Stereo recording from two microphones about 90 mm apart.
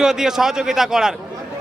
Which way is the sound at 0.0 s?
5° right (ahead or behind).